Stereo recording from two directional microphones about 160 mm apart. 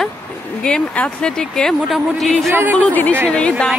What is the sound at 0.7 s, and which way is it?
Speech, 5° left (ahead or behind).